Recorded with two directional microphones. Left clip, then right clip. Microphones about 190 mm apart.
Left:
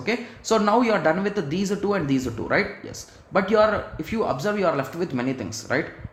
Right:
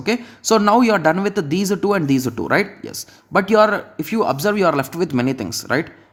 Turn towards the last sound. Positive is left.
turn(degrees=-45)  # may be behind; listen again after turning